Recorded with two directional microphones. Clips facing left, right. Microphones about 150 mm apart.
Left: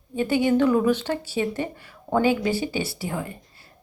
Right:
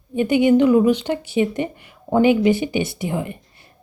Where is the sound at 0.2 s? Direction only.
15° right (ahead or behind).